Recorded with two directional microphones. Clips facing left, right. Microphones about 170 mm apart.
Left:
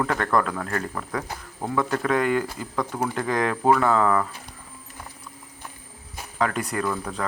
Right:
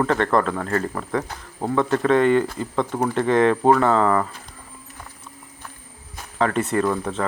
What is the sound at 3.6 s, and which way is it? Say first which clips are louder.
Speech: right 3 dB; 20° right (ahead or behind).